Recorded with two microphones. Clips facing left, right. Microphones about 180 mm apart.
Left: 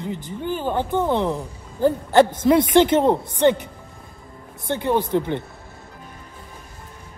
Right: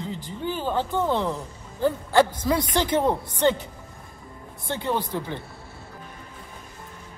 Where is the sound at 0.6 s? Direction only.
15° left (ahead or behind).